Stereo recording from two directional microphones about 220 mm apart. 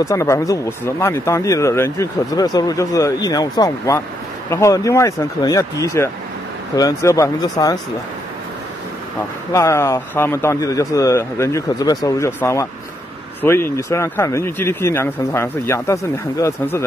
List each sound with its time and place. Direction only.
0.0 s speech: 15° left (ahead or behind)
9.5 s speech: 15° left (ahead or behind)